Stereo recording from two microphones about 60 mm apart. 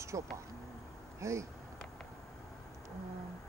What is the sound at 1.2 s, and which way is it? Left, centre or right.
Speech, right.